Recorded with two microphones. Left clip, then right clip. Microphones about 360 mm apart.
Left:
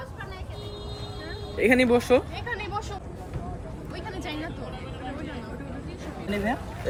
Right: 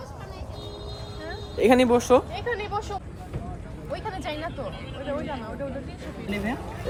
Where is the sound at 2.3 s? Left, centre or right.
Right.